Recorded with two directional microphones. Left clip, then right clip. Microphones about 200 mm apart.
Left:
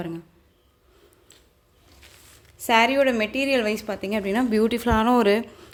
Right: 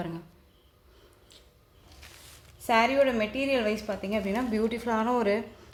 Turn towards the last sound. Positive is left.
turn(degrees=45)  # may be behind; listen again after turning